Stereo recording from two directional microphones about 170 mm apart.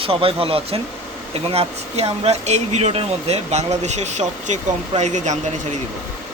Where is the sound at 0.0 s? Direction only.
35° right (ahead or behind).